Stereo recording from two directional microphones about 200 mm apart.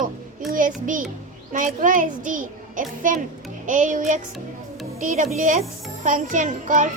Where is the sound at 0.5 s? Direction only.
40° right (ahead or behind).